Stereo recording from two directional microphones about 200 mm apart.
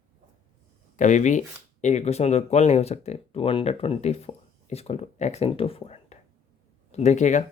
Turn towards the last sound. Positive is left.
turn(degrees=35)  # may be behind; listen again after turning